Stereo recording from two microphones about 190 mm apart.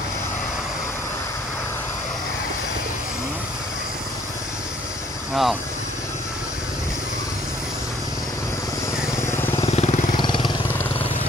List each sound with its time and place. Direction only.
5.3 s speech: centre (ahead or behind)
9.1 s vehicle: 15° left (ahead or behind)
9.7 s vehicle: 35° left (ahead or behind)
10.1 s vehicle: 25° left (ahead or behind)